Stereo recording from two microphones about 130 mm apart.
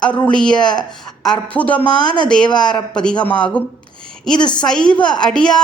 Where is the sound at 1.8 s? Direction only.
35° left (ahead or behind).